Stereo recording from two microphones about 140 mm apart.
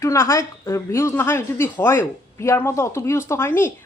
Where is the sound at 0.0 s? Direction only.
20° left (ahead or behind).